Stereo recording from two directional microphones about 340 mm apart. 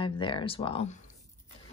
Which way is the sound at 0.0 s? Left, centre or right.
Centre.